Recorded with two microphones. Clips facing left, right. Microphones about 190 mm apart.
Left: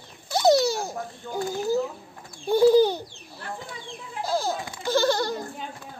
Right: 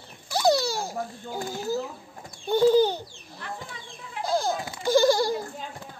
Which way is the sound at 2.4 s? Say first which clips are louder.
Left 2 dB; 10° left (ahead or behind).